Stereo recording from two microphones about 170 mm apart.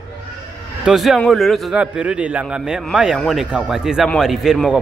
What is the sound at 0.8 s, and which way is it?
A man's voice, centre (ahead or behind).